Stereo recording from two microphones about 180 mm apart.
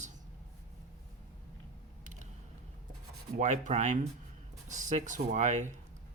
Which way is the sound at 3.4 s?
40° right (ahead or behind).